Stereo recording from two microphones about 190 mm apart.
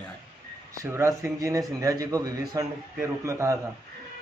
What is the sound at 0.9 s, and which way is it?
A man's voice, 15° right (ahead or behind).